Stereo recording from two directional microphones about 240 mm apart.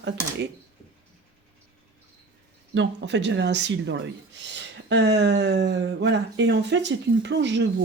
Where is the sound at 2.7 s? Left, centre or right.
Right.